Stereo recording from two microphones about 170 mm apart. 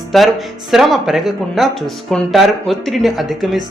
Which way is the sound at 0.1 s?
Centre (ahead or behind).